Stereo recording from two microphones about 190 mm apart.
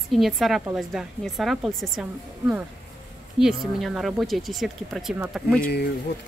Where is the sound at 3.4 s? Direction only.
Centre (ahead or behind).